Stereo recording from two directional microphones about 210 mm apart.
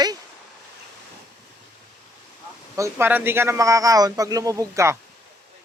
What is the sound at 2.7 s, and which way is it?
A man's voice, 15° right (ahead or behind).